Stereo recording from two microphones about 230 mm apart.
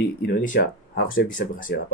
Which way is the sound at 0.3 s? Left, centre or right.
Left.